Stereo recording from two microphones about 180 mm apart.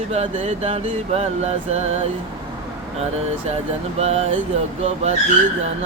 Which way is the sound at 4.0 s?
35° right (ahead or behind).